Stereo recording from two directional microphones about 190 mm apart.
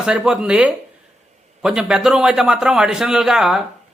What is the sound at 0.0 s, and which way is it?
A man's voice, 5° right (ahead or behind).